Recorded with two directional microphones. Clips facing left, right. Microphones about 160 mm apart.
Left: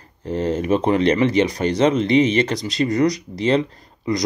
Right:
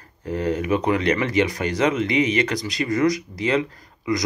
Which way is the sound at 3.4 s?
35° left (ahead or behind).